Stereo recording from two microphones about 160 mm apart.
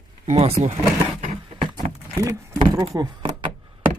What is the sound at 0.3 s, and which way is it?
Speech, 40° right (ahead or behind).